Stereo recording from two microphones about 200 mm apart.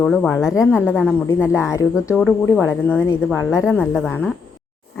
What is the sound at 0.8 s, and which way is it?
A woman's voice, 10° left (ahead or behind).